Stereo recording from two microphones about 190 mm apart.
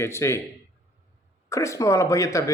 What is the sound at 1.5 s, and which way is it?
Speech, 15° left (ahead or behind).